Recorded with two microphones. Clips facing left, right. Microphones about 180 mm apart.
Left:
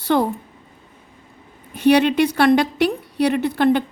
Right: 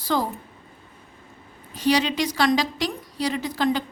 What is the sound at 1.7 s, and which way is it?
A woman's voice, 60° left (ahead or behind).